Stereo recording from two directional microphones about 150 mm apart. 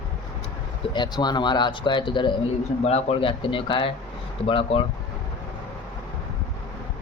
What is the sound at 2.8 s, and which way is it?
Speech, 45° left (ahead or behind).